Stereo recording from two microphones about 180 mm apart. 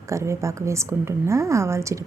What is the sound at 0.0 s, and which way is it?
A woman's voice, 15° right (ahead or behind).